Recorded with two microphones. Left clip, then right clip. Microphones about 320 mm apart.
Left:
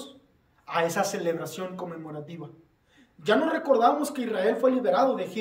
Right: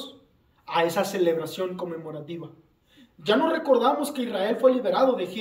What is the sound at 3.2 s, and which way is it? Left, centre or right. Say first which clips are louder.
A man's voice: right 1 dB; centre.